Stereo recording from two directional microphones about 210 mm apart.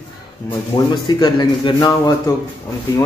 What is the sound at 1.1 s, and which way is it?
A man's voice, 20° left (ahead or behind).